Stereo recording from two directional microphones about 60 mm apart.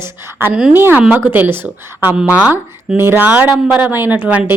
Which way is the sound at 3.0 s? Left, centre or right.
Right.